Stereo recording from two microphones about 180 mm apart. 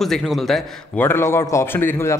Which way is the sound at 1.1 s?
15° left (ahead or behind).